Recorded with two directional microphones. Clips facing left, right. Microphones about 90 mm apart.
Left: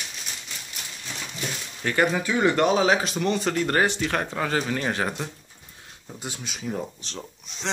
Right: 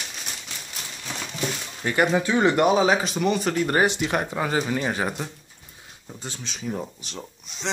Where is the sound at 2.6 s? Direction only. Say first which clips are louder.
Right 1 dB; 5° right (ahead or behind).